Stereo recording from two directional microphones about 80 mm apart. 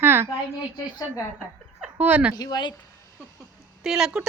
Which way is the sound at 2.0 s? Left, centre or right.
Right.